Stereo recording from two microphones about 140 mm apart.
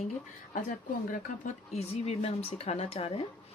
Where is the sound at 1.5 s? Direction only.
50° left (ahead or behind).